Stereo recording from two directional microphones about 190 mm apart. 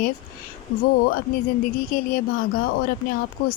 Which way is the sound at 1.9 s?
45° left (ahead or behind).